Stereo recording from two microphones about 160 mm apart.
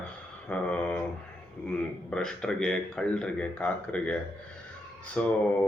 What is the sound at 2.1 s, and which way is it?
Speech, 5° left (ahead or behind).